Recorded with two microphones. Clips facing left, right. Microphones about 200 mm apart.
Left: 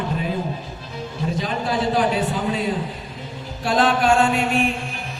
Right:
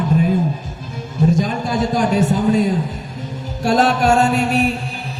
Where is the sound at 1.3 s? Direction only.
45° right (ahead or behind).